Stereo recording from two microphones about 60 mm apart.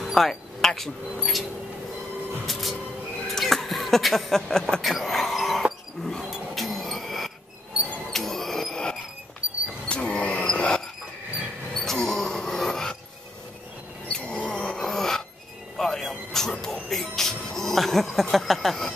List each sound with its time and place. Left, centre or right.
0.0 s speech: centre
2.4 s music: centre
3.3 s speech: centre
6.0 s a sound: centre
10.4 s dog: centre
11.8 s music: centre
14.2 s a sound: left
14.6 s a sound: centre
15.8 s music: centre